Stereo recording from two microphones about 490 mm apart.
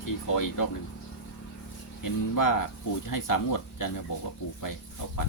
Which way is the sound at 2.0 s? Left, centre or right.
Left.